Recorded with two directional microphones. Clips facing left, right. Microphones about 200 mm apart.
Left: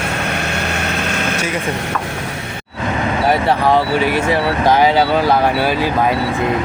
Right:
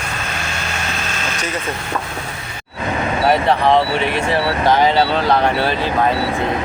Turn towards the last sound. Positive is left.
turn(degrees=10)  # may be behind; listen again after turning